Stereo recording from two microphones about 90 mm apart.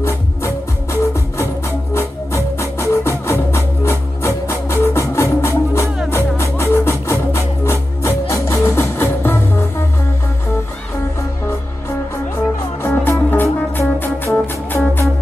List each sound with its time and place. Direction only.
2.0 s music: 30° left (ahead or behind)
12.8 s music: 25° left (ahead or behind)